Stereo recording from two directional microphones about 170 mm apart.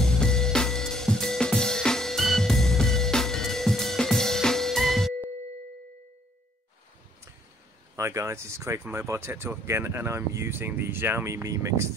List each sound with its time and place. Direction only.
0.0 s music: 5° left (ahead or behind)
7.9 s speech: 20° right (ahead or behind)